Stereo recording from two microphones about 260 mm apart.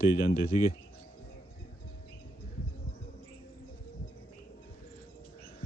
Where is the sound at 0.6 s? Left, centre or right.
Left.